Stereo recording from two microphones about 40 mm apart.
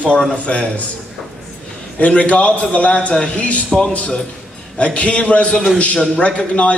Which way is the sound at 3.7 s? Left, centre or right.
Centre.